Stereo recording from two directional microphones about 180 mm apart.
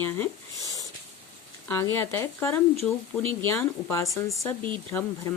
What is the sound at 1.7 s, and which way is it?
Speech, 15° left (ahead or behind).